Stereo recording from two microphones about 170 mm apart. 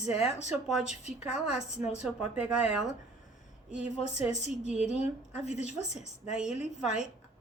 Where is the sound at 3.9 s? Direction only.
40° left (ahead or behind).